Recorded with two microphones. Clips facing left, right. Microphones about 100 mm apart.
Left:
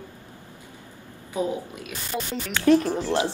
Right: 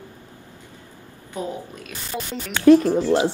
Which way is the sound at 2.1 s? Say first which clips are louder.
Even; centre (ahead or behind).